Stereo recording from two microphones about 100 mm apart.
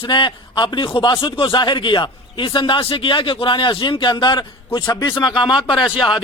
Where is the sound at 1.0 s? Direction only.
60° left (ahead or behind).